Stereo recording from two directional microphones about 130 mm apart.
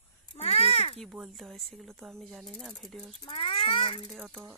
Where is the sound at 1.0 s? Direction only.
5° right (ahead or behind).